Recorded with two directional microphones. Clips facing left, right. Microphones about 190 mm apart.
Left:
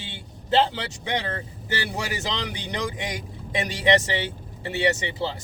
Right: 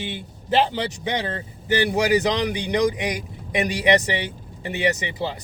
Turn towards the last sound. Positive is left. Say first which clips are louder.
# right 1 dB
turn(degrees=-15)  # may be behind; listen again after turning